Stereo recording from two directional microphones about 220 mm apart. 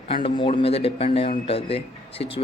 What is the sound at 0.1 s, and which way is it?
A man's voice, 25° left (ahead or behind).